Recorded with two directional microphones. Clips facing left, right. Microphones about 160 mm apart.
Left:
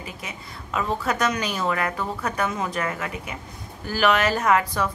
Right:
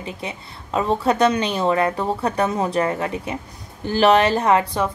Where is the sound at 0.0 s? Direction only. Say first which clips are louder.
Right 6 dB; 30° right (ahead or behind).